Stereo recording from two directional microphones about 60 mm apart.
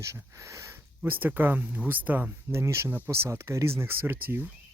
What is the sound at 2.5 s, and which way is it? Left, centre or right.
Speech, right.